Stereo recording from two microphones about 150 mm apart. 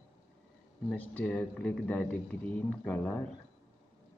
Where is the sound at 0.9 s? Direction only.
10° left (ahead or behind).